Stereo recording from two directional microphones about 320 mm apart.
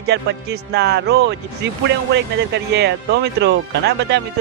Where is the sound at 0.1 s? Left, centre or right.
Right.